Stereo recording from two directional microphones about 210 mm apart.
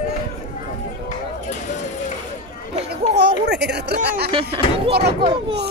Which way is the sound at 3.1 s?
55° right (ahead or behind).